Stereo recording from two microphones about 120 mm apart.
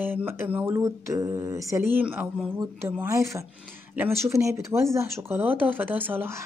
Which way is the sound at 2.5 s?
20° right (ahead or behind).